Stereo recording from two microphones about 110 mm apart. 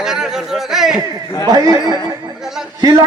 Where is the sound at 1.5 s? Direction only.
35° right (ahead or behind).